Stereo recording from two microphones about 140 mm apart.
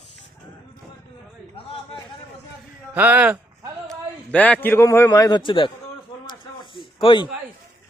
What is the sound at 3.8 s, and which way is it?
A man's voice, 10° left (ahead or behind).